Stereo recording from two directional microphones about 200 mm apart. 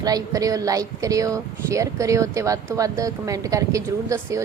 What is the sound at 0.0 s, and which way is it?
Speech, 20° right (ahead or behind).